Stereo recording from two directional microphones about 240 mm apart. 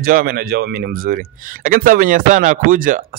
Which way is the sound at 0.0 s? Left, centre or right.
Right.